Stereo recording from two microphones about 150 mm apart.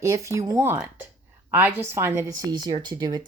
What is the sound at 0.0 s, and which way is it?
A woman's voice, 20° right (ahead or behind).